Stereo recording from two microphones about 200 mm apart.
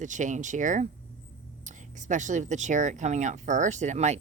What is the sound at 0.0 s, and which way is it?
Speech, 40° right (ahead or behind).